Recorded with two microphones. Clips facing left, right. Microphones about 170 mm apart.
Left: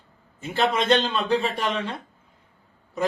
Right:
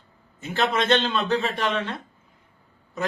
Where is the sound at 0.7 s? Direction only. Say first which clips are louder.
Left 1 dB; 10° left (ahead or behind).